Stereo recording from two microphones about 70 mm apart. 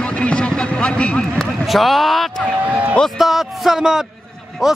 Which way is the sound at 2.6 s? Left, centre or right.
Right.